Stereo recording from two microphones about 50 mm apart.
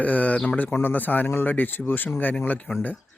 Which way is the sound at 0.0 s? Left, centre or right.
Left.